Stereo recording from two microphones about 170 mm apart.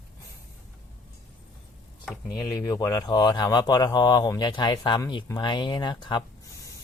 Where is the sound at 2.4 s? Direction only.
15° left (ahead or behind).